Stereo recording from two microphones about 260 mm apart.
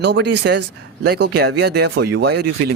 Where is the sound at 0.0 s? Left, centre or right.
Right.